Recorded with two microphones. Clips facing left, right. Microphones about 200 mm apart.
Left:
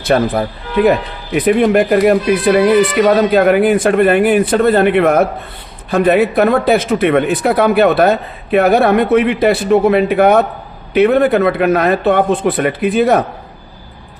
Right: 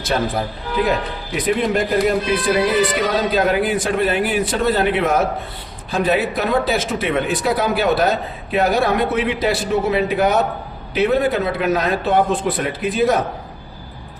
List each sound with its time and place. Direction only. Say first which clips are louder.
0.0 s speech: left 7 dB; 60° left (ahead or behind)